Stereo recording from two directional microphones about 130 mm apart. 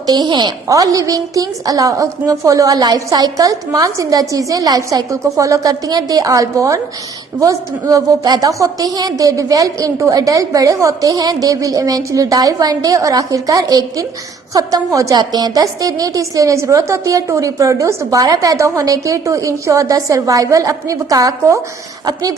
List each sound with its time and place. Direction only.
0.0 s a woman's voice: 30° right (ahead or behind)